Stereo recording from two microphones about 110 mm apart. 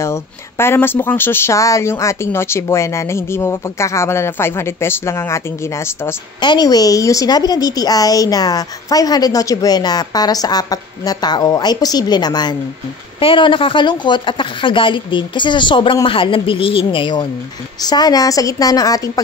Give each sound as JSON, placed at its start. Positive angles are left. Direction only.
{"t": 0.0, "sound": "speech", "side_deg": 25}
{"t": 6.4, "sound": "a woman's voice", "side_deg": 40}
{"t": 13.2, "sound": "speech", "side_deg": 50}
{"t": 17.8, "sound": "a woman's voice", "side_deg": 40}